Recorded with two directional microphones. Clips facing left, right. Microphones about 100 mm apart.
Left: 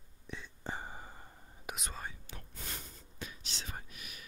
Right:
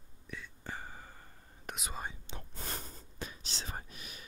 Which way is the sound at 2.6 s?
40° right (ahead or behind).